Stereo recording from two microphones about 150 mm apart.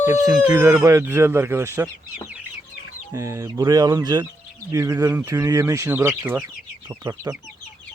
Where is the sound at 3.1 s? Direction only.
20° right (ahead or behind).